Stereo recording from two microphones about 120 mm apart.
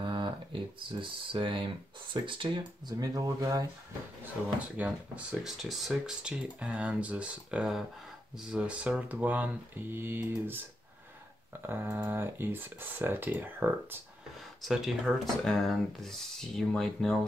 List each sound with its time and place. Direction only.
0.0 s speech: 40° right (ahead or behind)
4.2 s speech: 10° right (ahead or behind)
11.6 s speech: 20° right (ahead or behind)
14.6 s speech: 5° right (ahead or behind)